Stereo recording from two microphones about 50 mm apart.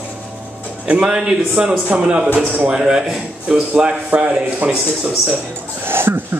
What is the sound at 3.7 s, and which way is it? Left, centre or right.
A man's voice, right.